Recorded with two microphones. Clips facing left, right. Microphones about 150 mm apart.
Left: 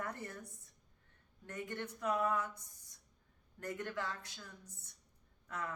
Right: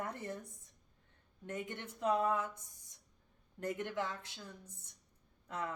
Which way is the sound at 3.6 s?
20° right (ahead or behind).